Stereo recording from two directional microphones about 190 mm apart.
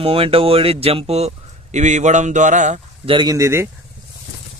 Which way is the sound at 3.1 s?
20° right (ahead or behind).